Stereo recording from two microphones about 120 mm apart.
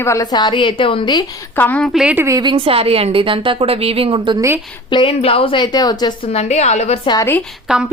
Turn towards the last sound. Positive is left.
turn(degrees=-5)  # may be behind; listen again after turning